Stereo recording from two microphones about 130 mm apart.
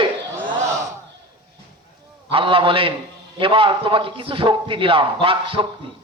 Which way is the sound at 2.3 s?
45° right (ahead or behind).